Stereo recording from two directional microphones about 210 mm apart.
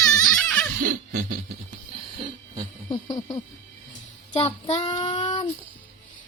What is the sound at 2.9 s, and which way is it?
Speech, 15° left (ahead or behind).